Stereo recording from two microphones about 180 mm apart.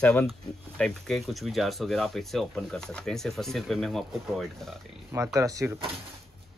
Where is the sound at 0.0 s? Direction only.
5° left (ahead or behind).